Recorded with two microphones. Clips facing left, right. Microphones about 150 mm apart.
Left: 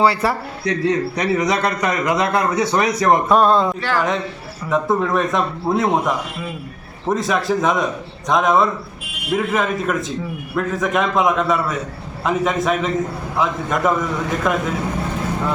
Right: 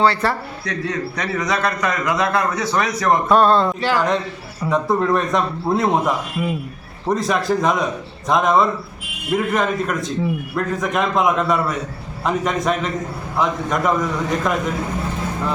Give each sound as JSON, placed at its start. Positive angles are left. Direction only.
{"t": 0.0, "sound": "a man's voice", "side_deg": 5}
{"t": 0.6, "sound": "a man's voice", "side_deg": 15}
{"t": 3.2, "sound": "a man's voice", "side_deg": 0}
{"t": 3.8, "sound": "a man's voice", "side_deg": -15}
{"t": 4.7, "sound": "a man's voice", "side_deg": 0}